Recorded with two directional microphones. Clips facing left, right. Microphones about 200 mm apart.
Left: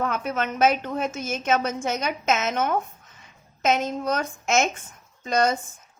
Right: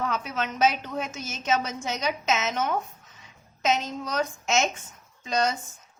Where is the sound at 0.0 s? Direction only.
55° left (ahead or behind).